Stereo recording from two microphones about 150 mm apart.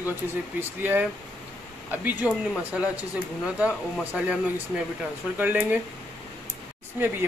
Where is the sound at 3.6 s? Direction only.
5° right (ahead or behind).